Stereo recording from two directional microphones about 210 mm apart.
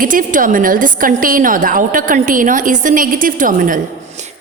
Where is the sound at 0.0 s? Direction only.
40° right (ahead or behind).